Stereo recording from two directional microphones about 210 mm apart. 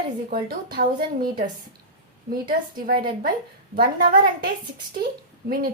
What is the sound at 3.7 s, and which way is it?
Speech, 45° right (ahead or behind).